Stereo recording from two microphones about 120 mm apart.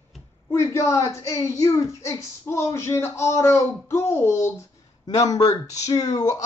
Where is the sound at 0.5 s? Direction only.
25° left (ahead or behind).